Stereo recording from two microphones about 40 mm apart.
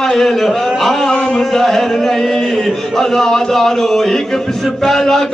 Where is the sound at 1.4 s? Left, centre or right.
Centre.